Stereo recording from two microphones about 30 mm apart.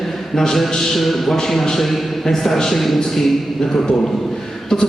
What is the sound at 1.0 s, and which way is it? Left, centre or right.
A man's voice, centre.